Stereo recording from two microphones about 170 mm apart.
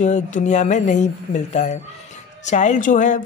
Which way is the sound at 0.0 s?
45° left (ahead or behind).